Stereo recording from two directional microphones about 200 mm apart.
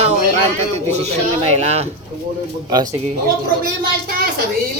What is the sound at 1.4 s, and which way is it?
Speech, 30° right (ahead or behind).